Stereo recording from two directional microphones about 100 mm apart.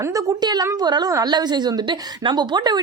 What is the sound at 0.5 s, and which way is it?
A woman's voice, 45° right (ahead or behind).